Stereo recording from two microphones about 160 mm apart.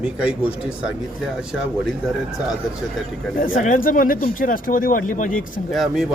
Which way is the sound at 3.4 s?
60° left (ahead or behind).